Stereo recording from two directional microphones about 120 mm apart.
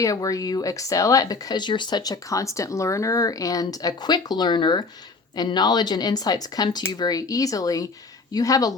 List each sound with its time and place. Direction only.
0.0 s a woman's voice: 30° left (ahead or behind)